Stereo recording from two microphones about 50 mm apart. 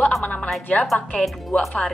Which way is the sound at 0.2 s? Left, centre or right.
Left.